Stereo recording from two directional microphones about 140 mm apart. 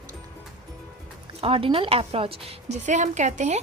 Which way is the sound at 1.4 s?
40° right (ahead or behind).